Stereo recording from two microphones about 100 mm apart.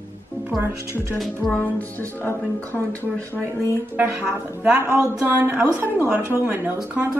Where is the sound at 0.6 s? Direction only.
25° right (ahead or behind).